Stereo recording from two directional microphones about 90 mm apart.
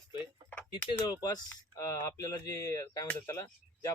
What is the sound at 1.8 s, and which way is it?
Speech, 35° left (ahead or behind).